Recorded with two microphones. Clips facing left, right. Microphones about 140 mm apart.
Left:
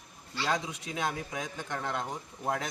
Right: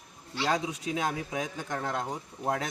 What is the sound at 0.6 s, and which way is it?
A man's voice, 20° right (ahead or behind).